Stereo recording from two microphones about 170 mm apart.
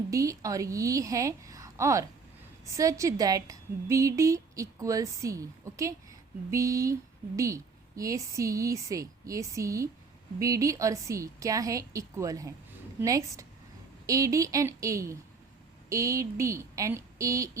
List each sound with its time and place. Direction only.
0.1 s a woman's voice: 20° right (ahead or behind)